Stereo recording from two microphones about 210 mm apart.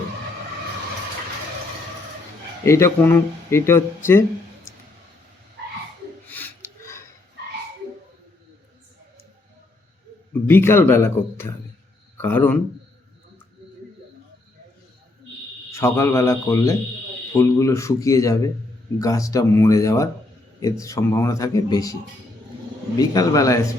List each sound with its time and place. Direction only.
2.6 s speech: 15° left (ahead or behind)
6.2 s a sound: 10° left (ahead or behind)
10.5 s speech: 10° left (ahead or behind)
15.7 s speech: 15° left (ahead or behind)
23.0 s speech: 15° left (ahead or behind)